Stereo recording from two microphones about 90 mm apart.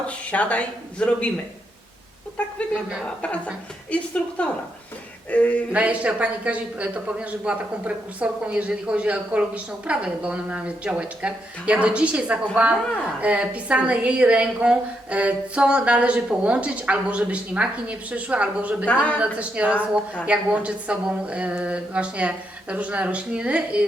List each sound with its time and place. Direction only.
0.1 s speech: 15° left (ahead or behind)
2.4 s speech: 15° left (ahead or behind)
3.9 s speech: 15° left (ahead or behind)
5.7 s a man's voice: 15° right (ahead or behind)